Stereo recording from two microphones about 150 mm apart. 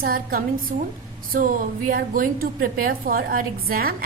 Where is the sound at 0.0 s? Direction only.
75° right (ahead or behind).